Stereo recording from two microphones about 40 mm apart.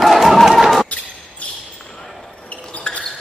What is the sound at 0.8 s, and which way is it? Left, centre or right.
Basketball bounce, left.